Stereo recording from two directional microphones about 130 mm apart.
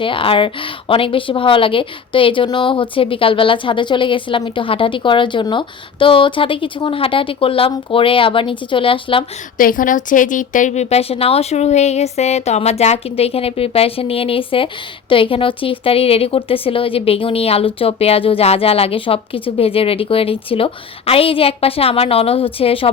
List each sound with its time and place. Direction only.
0.0 s speech: 40° left (ahead or behind)
9.6 s a woman's voice: 90° left; by 22.9 s 45° left (ahead or behind)